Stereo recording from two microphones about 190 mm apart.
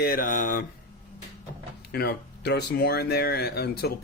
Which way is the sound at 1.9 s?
60° left (ahead or behind).